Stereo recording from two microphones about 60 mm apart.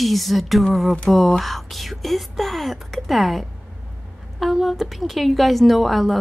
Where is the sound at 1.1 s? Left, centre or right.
Centre.